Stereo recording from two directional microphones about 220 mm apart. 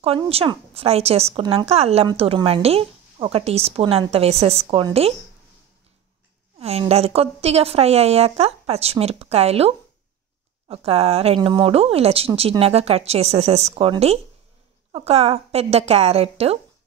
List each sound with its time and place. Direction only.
0.0 s speech: 25° right (ahead or behind)
6.6 s speech: 25° right (ahead or behind)